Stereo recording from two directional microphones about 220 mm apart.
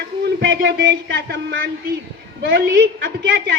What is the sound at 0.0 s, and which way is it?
A woman's voice, 50° right (ahead or behind).